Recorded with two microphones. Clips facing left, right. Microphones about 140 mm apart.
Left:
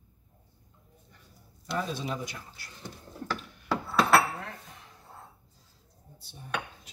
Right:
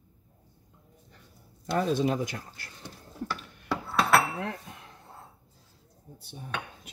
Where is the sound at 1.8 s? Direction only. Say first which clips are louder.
Right 7 dB; 50° right (ahead or behind).